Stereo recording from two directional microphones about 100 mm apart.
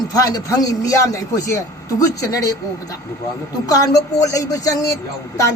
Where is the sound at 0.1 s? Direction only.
40° left (ahead or behind).